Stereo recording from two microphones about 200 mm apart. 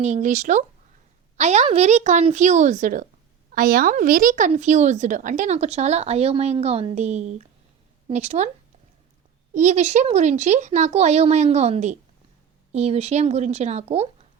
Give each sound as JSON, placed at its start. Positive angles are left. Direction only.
{"t": 0.0, "sound": "speech", "side_deg": -35}
{"t": 9.6, "sound": "speech", "side_deg": -35}